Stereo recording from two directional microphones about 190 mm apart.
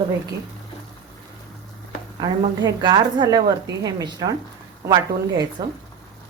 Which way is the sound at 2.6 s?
25° right (ahead or behind).